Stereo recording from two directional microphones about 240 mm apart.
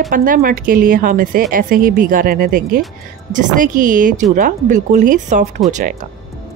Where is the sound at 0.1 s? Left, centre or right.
Right.